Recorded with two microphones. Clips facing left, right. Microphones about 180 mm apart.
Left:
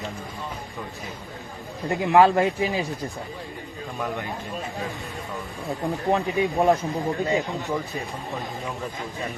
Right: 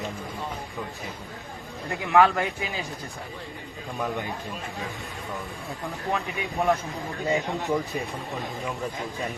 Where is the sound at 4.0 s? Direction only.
Centre (ahead or behind).